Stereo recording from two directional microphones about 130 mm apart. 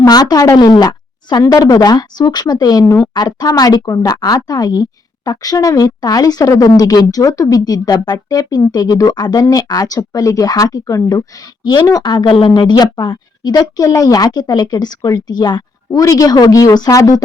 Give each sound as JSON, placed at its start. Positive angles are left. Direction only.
{"t": 0.0, "sound": "a woman's voice", "side_deg": 30}